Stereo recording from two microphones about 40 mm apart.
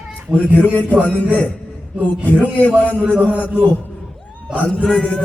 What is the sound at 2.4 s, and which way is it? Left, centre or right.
Speech, left.